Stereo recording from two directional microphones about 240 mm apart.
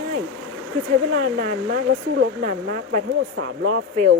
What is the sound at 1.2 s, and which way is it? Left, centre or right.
Speech, right.